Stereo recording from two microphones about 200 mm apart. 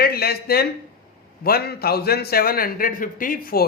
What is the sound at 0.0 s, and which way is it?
Speech, 50° left (ahead or behind).